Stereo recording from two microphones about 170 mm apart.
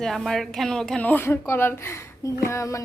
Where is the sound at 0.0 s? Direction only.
Centre (ahead or behind).